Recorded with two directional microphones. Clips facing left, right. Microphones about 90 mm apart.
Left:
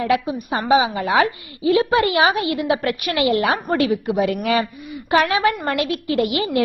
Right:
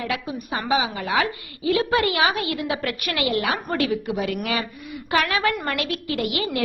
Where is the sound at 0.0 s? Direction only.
30° left (ahead or behind).